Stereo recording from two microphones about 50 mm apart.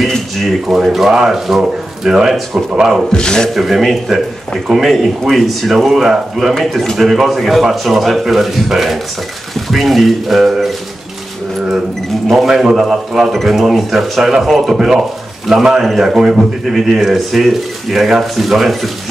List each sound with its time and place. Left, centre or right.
0.5 s speech: centre
2.7 s speech: centre
3.1 s a man's voice: centre
3.5 s speech: centre
12.3 s speech: centre